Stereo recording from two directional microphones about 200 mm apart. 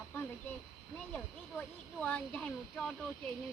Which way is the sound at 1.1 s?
5° left (ahead or behind).